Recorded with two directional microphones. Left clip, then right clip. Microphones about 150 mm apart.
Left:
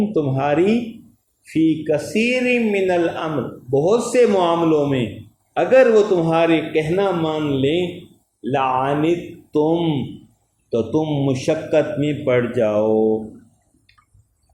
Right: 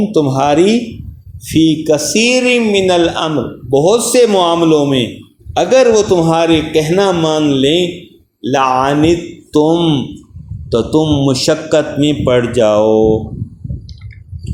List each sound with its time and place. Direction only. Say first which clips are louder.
0.1 s a man's voice: right 10 dB; 65° right (ahead or behind)
2.1 s a man's voice: right 7 dB; 55° right (ahead or behind)